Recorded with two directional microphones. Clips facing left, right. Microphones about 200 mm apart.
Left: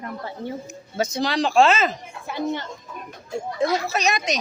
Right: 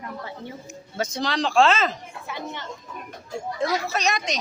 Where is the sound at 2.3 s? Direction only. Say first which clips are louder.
Left 8 dB; 35° left (ahead or behind).